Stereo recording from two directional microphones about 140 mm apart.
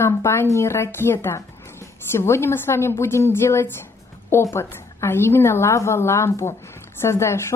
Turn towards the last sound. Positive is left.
turn(degrees=20)  # may be behind; listen again after turning